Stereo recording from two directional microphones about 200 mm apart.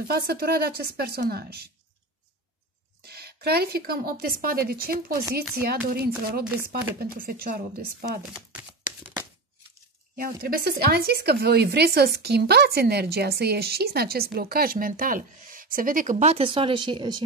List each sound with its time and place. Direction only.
0.1 s speech: 50° right (ahead or behind)
3.0 s speech: 50° right (ahead or behind)
8.4 s speech: 5° right (ahead or behind)
10.1 s speech: 45° right (ahead or behind); by 17.2 s 25° right (ahead or behind)